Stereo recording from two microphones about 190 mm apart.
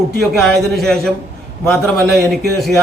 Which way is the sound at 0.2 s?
Centre (ahead or behind).